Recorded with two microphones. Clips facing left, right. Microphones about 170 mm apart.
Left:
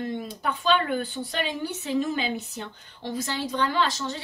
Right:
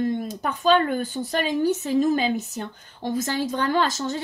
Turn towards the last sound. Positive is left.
turn(degrees=-45)  # may be behind; listen again after turning